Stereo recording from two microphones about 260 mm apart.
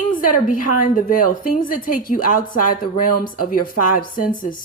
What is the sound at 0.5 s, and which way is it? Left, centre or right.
Speech, left.